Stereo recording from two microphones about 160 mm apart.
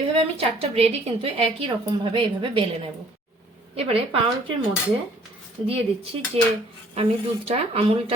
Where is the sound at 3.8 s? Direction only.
40° right (ahead or behind).